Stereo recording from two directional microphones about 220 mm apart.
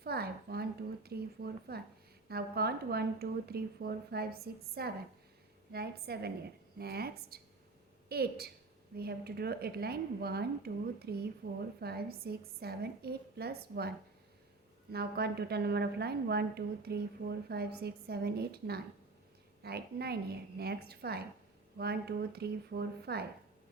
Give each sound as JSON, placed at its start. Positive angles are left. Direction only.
{"t": 0.0, "sound": "a sound", "side_deg": -45}
{"t": 2.3, "sound": "a woman's voice", "side_deg": -45}
{"t": 14.9, "sound": "a woman's voice", "side_deg": -45}